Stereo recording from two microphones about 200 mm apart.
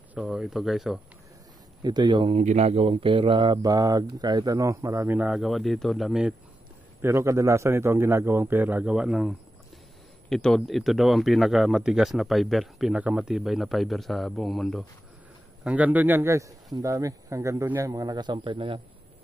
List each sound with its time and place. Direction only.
0.1 s speech: 5° right (ahead or behind)
1.8 s speech: 20° right (ahead or behind); by 6.3 s centre (ahead or behind)
7.0 s a man's voice: 15° right (ahead or behind)
10.3 s a man's voice: centre (ahead or behind); by 18.8 s 25° right (ahead or behind)